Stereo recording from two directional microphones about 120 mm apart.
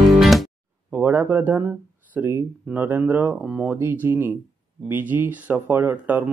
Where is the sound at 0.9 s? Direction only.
15° right (ahead or behind).